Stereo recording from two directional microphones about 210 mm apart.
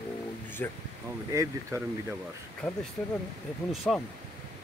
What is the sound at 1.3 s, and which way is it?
Speech, 15° right (ahead or behind).